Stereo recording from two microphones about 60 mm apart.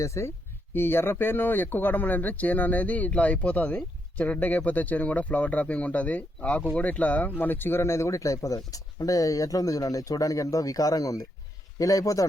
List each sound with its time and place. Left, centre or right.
0.0 s speech: left
0.7 s speech: left
11.8 s speech: left